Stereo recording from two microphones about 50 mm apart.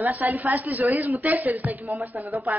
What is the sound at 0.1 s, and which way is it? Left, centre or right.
Speech, right.